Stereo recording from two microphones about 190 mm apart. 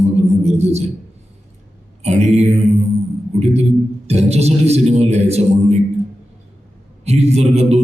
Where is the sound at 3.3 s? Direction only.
35° right (ahead or behind).